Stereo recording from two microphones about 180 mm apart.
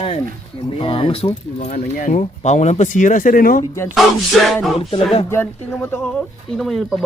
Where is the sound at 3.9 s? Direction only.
Centre (ahead or behind).